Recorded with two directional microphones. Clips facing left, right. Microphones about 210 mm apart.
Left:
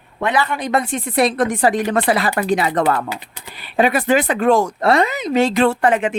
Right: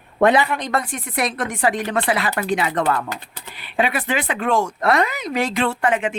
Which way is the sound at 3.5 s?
40° left (ahead or behind).